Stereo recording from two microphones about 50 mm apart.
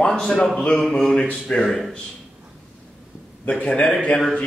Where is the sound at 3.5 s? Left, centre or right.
Left.